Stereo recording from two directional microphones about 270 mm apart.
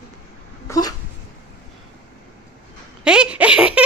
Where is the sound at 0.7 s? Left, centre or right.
Centre.